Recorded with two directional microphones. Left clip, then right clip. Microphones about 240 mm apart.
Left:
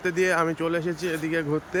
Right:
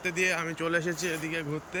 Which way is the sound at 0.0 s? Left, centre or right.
Centre.